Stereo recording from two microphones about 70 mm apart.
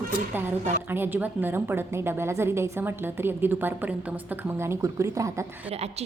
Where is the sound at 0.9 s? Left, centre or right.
Right.